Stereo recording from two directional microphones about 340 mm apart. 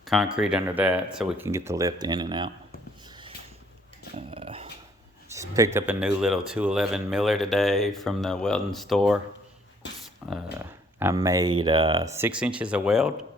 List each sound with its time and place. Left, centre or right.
0.0 s speech: centre
3.1 s a sound: centre
4.3 s dog: centre
5.3 s speech: centre
10.2 s speech: centre